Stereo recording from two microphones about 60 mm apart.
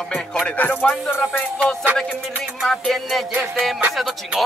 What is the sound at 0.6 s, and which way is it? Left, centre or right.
Music, left.